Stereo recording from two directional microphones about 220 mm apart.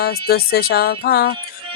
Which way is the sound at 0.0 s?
45° left (ahead or behind).